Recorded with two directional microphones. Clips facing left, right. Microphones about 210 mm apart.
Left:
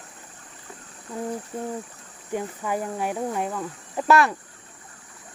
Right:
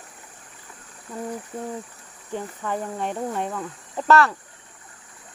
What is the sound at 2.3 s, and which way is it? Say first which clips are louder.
Speech: left 1 dB; 10° left (ahead or behind).